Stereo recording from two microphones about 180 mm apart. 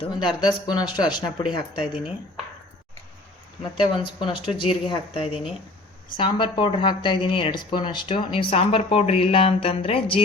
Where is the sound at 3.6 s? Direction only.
25° left (ahead or behind).